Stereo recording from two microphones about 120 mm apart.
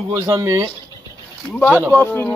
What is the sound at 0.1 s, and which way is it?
Speech, 25° right (ahead or behind).